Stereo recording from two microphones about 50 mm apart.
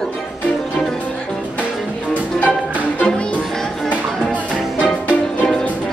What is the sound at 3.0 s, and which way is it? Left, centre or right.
Music, centre.